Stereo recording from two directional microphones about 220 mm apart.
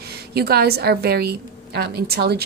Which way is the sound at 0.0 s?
45° right (ahead or behind).